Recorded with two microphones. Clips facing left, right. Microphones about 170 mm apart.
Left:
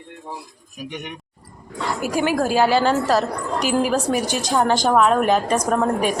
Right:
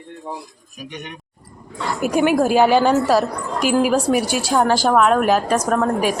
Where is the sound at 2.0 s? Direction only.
20° right (ahead or behind).